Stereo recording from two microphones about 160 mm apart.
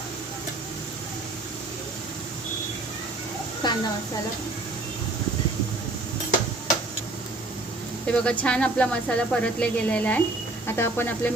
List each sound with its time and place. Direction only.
3.6 s a woman's voice: 25° left (ahead or behind)
8.0 s speech: 5° left (ahead or behind)